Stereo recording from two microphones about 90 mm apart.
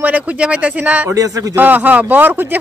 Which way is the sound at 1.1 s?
40° right (ahead or behind).